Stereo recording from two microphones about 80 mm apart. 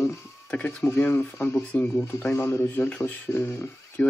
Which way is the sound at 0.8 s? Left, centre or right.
Left.